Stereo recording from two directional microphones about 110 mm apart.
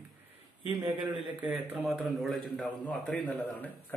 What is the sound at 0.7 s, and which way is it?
Speech, 40° right (ahead or behind).